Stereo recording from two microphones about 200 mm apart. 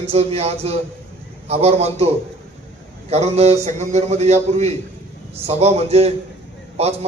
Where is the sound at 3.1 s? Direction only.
30° right (ahead or behind).